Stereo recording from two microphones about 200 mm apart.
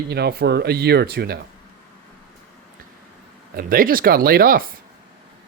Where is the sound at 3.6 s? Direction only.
45° right (ahead or behind).